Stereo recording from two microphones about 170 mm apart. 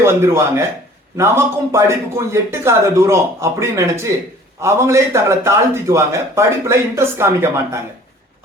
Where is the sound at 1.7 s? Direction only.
15° right (ahead or behind).